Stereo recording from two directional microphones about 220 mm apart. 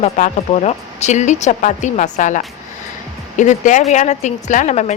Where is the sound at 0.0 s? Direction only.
30° left (ahead or behind).